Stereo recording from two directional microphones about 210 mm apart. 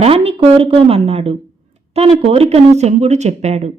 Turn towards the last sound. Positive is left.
turn(degrees=-30)  # may be behind; listen again after turning